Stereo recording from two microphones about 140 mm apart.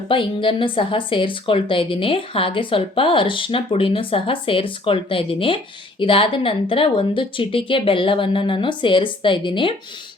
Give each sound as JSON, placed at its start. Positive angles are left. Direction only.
{"t": 0.1, "sound": "a woman's voice", "side_deg": 35}